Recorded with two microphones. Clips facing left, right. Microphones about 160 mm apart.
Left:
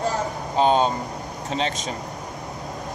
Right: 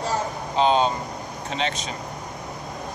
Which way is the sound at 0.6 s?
45° left (ahead or behind).